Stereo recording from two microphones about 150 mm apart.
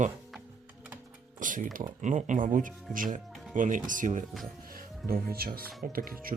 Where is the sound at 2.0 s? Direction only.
55° right (ahead or behind).